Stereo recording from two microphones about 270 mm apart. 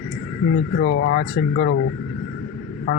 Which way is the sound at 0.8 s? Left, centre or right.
Left.